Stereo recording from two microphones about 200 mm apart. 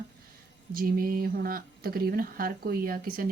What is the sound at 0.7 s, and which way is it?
Speech, 45° right (ahead or behind).